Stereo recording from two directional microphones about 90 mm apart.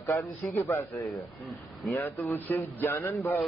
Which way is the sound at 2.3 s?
25° left (ahead or behind).